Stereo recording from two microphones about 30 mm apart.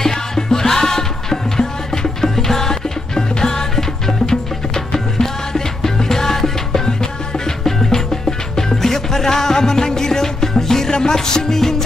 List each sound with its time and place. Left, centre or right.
0.0 s music: centre